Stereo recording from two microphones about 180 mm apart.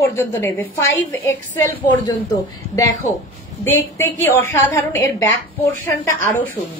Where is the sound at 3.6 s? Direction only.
10° left (ahead or behind).